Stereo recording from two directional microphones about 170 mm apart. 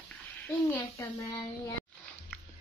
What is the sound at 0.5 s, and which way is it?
Speech, 15° left (ahead or behind).